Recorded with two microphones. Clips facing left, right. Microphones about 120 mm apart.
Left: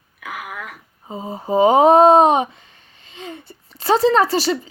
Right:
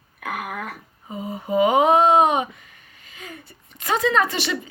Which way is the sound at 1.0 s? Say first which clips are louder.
Left 3 dB; 30° left (ahead or behind).